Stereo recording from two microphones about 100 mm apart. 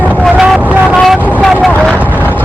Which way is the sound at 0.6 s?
15° right (ahead or behind).